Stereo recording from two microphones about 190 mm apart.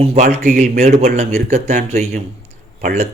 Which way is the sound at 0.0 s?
35° right (ahead or behind).